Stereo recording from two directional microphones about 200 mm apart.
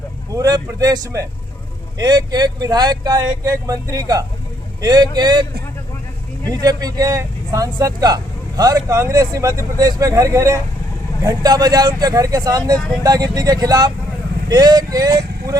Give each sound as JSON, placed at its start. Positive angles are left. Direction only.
{"t": 0.3, "sound": "speech", "side_deg": -20}
{"t": 6.5, "sound": "speech", "side_deg": -20}